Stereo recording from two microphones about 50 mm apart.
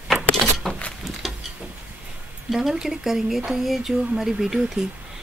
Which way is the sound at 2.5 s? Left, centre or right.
Centre.